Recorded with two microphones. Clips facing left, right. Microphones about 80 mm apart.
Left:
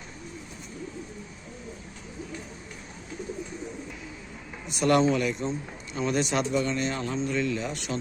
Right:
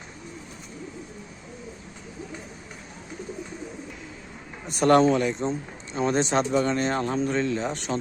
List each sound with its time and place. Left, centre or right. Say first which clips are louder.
4.6 s speech: right 4 dB; right